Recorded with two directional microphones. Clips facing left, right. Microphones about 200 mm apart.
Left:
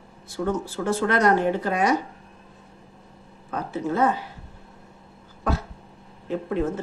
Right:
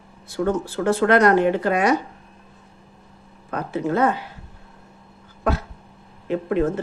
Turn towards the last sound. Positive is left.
turn(degrees=-70)  # may be behind; listen again after turning